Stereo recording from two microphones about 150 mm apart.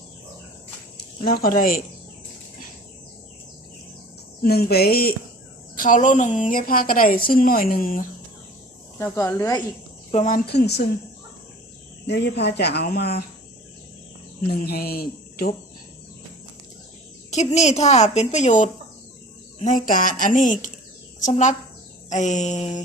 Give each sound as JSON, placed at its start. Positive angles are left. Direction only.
{"t": 1.2, "sound": "a woman's voice", "side_deg": 75}
{"t": 4.4, "sound": "speech", "side_deg": 90}
{"t": 5.7, "sound": "a woman's voice", "side_deg": 65}
{"t": 9.1, "sound": "speech", "side_deg": 20}
{"t": 10.2, "sound": "speech", "side_deg": 75}
{"t": 12.2, "sound": "speech", "side_deg": 90}
{"t": 14.4, "sound": "speech", "side_deg": 85}
{"t": 17.3, "sound": "a woman's voice", "side_deg": 50}